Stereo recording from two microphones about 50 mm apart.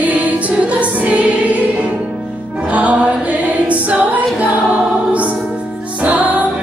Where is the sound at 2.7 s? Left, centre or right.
Right.